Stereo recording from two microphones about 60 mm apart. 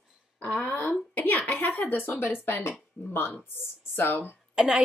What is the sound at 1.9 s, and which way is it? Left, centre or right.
Speech, left.